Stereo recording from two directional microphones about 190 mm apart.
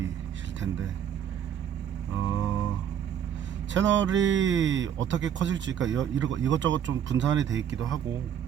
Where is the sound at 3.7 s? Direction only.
75° right (ahead or behind).